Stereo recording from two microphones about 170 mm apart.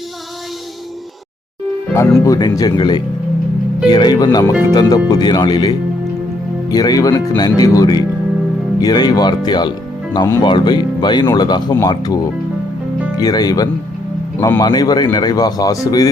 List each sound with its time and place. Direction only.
1.9 s speech: 15° left (ahead or behind)
14.3 s speech: 10° left (ahead or behind)
14.6 s speech: 25° left (ahead or behind)